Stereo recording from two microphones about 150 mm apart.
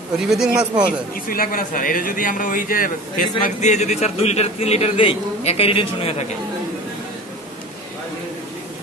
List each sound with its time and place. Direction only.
0.3 s speech: 5° right (ahead or behind)
1.1 s a man's voice: 70° left (ahead or behind); by 6.2 s 40° left (ahead or behind)